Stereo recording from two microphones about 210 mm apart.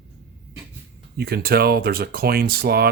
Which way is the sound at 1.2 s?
45° right (ahead or behind).